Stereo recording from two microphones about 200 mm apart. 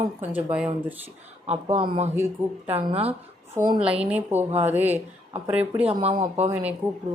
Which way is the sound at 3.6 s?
10° right (ahead or behind).